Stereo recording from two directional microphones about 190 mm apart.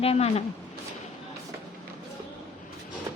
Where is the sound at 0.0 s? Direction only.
30° left (ahead or behind).